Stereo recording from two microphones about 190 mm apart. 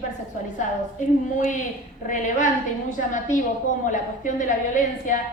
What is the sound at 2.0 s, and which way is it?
A woman's voice, 40° left (ahead or behind).